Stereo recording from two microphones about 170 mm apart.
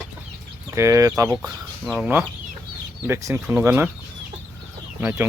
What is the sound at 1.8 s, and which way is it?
Speech, 5° right (ahead or behind).